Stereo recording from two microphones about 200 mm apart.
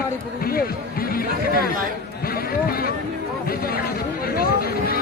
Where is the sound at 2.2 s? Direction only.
50° left (ahead or behind).